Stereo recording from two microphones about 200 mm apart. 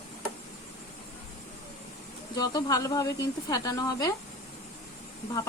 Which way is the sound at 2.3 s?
20° left (ahead or behind).